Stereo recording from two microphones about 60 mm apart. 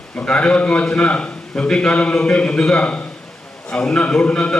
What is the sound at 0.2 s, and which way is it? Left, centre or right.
A man's voice, left.